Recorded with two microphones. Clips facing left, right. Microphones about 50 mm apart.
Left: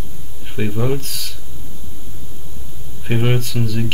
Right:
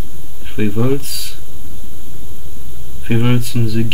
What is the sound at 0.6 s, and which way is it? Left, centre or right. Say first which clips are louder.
Speech: right 4 dB; centre.